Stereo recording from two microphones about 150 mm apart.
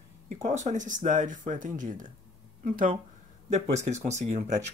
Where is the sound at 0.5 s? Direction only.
55° right (ahead or behind).